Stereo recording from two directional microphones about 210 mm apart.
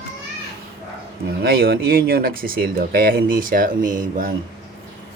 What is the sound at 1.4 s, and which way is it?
Speech, 45° right (ahead or behind).